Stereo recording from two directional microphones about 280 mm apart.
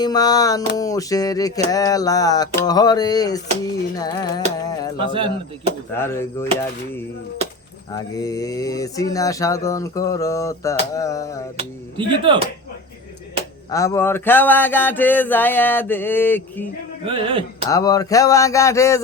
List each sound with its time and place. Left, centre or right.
0.0 s mantra: centre
4.9 s speech: centre
6.0 s mantra: centre
7.9 s mantra: centre
11.5 s speech: centre
13.7 s mantra: centre
17.1 s speech: centre
17.7 s mantra: centre